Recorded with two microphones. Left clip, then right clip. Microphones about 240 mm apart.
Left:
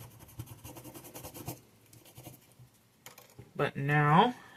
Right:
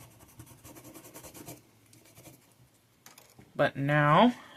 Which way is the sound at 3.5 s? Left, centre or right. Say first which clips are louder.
Right 4 dB; right.